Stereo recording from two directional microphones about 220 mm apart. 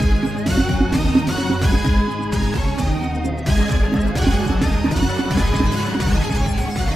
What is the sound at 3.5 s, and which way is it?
Music, centre (ahead or behind).